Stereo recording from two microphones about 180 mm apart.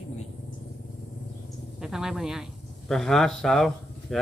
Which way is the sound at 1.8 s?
5° right (ahead or behind).